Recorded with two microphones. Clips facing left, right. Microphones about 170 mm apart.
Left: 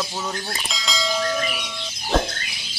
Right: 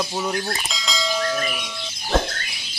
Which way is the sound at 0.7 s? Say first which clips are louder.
Even; centre (ahead or behind).